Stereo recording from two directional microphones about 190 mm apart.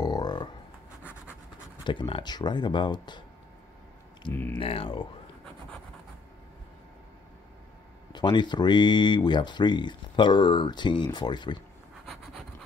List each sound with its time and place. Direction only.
0.0 s a sound: 20° left (ahead or behind)
1.9 s speech: 25° left (ahead or behind)
4.3 s speech: 10° left (ahead or behind)
4.6 s speech: 30° left (ahead or behind)
8.1 s speech: 25° left (ahead or behind)